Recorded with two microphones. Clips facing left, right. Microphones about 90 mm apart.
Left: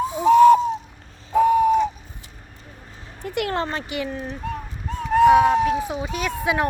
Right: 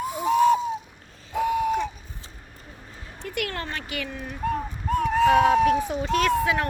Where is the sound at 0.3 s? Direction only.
60° left (ahead or behind).